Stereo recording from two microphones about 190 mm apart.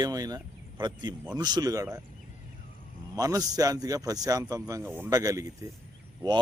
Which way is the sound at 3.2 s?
20° right (ahead or behind).